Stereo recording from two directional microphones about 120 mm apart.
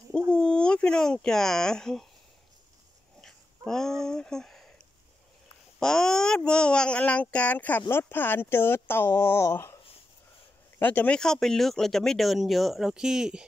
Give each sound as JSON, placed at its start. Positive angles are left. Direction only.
{"t": 0.3, "sound": "speech", "side_deg": 10}
{"t": 3.2, "sound": "a sound", "side_deg": 5}
{"t": 5.8, "sound": "speech", "side_deg": 5}
{"t": 10.8, "sound": "speech", "side_deg": 15}